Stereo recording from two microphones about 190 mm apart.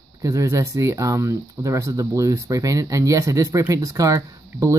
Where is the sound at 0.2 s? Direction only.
15° right (ahead or behind).